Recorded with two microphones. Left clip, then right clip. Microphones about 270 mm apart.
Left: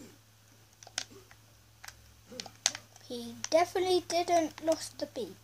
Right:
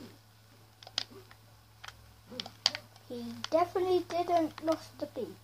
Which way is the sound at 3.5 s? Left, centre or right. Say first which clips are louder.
Left 1 dB; left.